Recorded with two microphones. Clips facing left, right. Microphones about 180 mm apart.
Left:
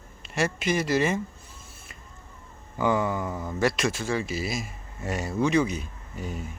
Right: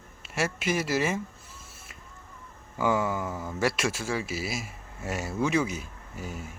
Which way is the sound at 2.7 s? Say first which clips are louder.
Left 2 dB; 5° right (ahead or behind).